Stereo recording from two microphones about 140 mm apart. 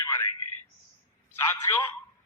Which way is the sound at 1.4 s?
15° left (ahead or behind).